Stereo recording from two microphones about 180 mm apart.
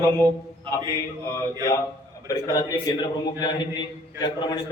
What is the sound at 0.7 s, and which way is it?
Mantra, 25° right (ahead or behind).